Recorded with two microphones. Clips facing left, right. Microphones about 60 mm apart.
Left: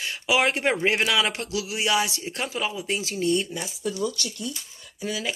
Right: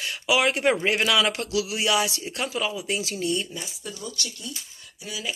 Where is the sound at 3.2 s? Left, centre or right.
Left.